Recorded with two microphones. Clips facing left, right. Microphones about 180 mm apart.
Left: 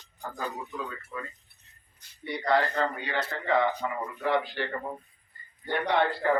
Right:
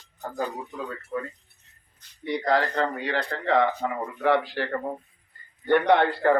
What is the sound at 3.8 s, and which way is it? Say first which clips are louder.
Speech: right 4 dB; 60° right (ahead or behind).